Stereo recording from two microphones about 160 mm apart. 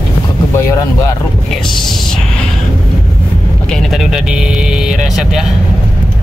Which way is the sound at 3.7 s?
Centre (ahead or behind).